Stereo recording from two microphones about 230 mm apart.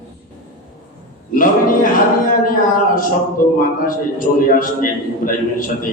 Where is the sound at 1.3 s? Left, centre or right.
Left.